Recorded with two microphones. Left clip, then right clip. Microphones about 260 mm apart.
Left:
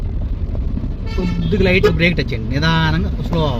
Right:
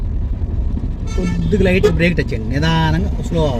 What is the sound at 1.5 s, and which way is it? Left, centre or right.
Speech, centre.